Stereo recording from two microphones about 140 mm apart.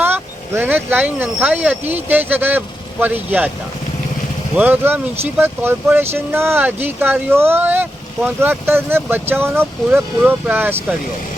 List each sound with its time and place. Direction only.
0.0 s speech: 15° right (ahead or behind)
4.5 s speech: 10° right (ahead or behind)